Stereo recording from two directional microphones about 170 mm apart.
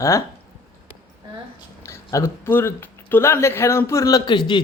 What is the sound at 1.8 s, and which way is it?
Speech, 15° left (ahead or behind).